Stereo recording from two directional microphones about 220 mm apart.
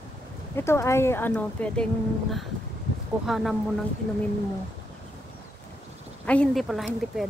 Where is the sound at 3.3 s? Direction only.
Centre (ahead or behind).